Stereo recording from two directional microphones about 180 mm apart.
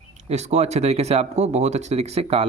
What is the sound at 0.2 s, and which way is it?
Speech, 40° right (ahead or behind).